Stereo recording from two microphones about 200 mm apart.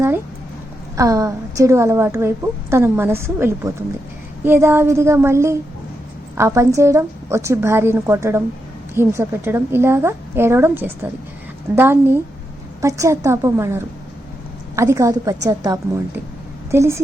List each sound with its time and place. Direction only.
0.9 s a woman's voice: 15° right (ahead or behind)